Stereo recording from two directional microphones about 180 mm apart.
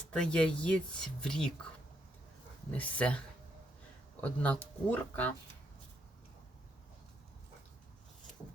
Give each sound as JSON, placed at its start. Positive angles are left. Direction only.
{"t": 0.1, "sound": "speech", "side_deg": 5}
{"t": 2.7, "sound": "speech", "side_deg": 10}